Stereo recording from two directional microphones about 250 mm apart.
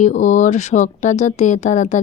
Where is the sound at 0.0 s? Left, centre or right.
Left.